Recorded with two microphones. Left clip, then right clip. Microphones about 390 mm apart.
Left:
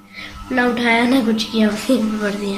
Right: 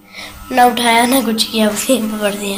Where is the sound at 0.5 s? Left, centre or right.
Centre.